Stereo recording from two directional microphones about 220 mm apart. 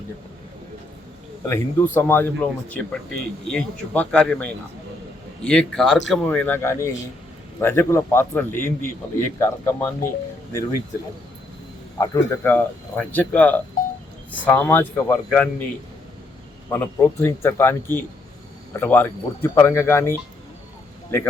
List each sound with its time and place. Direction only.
1.5 s a man's voice: 10° left (ahead or behind)
11.9 s a man's voice: 15° left (ahead or behind)
16.7 s a man's voice: 10° left (ahead or behind)